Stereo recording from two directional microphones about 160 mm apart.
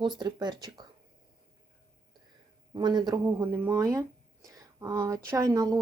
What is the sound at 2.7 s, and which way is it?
Speech, 25° right (ahead or behind).